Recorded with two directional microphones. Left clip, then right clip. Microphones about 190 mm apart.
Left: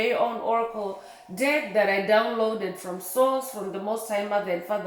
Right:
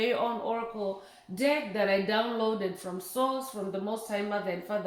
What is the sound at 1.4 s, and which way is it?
Speech, 25° right (ahead or behind).